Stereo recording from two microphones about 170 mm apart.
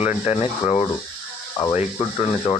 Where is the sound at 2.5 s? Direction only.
25° left (ahead or behind).